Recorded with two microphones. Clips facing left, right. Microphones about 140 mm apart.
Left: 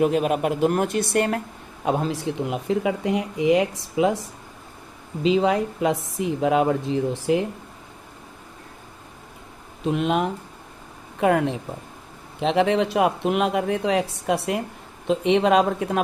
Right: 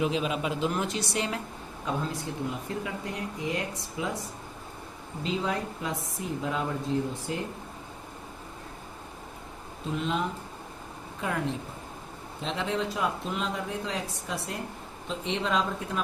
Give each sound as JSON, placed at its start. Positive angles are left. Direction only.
{"t": 0.0, "sound": "speech", "side_deg": 55}
{"t": 1.8, "sound": "speech", "side_deg": 70}
{"t": 5.2, "sound": "speech", "side_deg": 85}
{"t": 9.8, "sound": "speech", "side_deg": 70}